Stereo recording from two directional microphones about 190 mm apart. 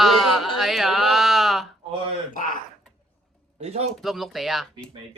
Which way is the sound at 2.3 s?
45° left (ahead or behind).